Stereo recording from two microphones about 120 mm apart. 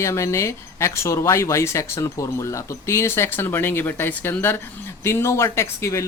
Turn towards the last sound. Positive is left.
turn(degrees=25)  # may be behind; listen again after turning